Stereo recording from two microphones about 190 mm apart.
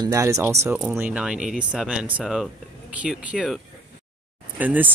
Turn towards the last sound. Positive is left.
turn(degrees=-10)  # may be behind; listen again after turning